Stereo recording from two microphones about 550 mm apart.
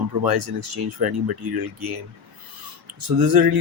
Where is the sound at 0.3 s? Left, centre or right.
Right.